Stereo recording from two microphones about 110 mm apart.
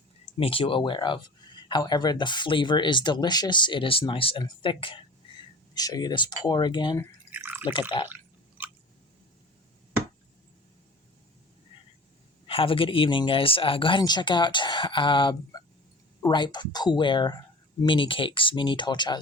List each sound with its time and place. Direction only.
0.3 s speech: 60° left (ahead or behind)
5.7 s speech: 35° left (ahead or behind)
7.3 s drip: 20° right (ahead or behind)
7.6 s speech: 50° left (ahead or behind)
8.0 s drip: 15° right (ahead or behind)
12.5 s speech: 55° left (ahead or behind)